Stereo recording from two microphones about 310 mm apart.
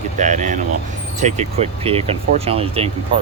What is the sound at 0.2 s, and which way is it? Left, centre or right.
Speech, right.